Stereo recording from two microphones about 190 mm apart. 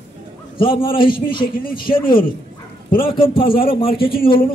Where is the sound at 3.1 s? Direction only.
25° left (ahead or behind).